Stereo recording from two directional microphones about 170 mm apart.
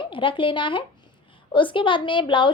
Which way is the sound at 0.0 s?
30° left (ahead or behind).